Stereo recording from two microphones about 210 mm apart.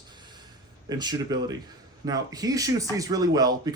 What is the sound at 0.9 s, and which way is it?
Speech, 20° right (ahead or behind).